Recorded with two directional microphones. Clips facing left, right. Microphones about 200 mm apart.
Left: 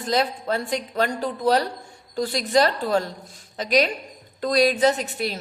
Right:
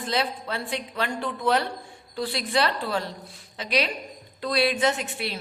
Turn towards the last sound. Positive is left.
turn(degrees=40)  # may be behind; listen again after turning